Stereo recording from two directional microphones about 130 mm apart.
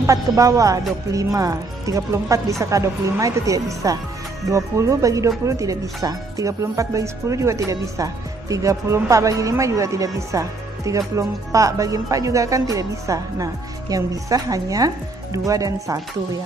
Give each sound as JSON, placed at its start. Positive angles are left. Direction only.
{"t": 0.0, "sound": "speech", "side_deg": -25}